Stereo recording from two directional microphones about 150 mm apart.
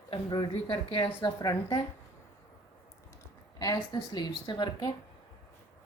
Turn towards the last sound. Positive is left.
turn(degrees=30)  # may be behind; listen again after turning